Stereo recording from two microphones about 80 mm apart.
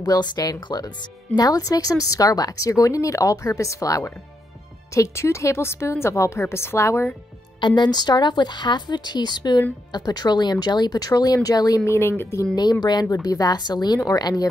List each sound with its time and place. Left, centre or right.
0.0 s a woman's voice: left
7.6 s speech: left
11.8 s a woman's voice: left
13.1 s speech: left